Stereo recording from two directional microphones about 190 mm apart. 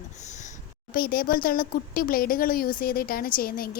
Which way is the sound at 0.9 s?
50° left (ahead or behind).